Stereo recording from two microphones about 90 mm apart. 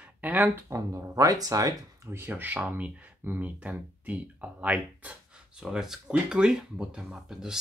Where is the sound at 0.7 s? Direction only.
40° right (ahead or behind).